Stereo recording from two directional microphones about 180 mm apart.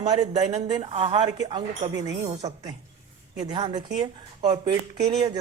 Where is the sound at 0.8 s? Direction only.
35° right (ahead or behind).